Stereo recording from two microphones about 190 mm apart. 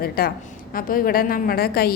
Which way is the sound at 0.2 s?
50° left (ahead or behind).